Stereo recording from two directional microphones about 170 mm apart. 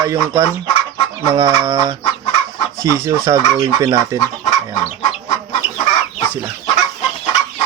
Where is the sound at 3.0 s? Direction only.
20° right (ahead or behind).